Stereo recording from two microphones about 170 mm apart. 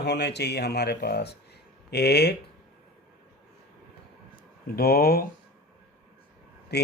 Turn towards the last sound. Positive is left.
turn(degrees=75)  # may be behind; listen again after turning